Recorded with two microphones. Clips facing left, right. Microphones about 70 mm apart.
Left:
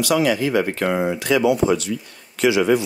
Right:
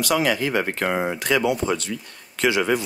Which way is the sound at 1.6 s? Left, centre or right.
Left.